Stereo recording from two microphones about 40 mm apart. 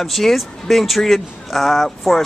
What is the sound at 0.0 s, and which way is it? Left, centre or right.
Speech, centre.